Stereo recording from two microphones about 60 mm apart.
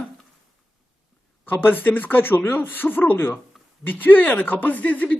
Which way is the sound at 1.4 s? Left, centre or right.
Left.